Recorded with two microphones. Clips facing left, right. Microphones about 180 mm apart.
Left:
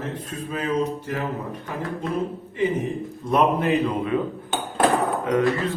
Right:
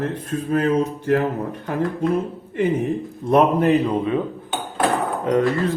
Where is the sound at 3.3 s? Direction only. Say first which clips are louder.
Right 4 dB; 40° right (ahead or behind).